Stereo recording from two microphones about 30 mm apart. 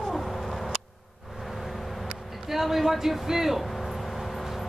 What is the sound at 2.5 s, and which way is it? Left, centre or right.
Speech, centre.